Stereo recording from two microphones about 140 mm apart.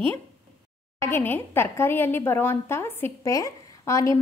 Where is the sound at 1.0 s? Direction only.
15° left (ahead or behind).